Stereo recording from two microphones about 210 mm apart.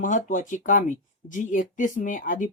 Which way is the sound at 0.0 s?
40° left (ahead or behind).